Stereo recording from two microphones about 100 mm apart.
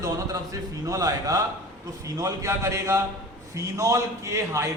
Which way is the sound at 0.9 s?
35° right (ahead or behind).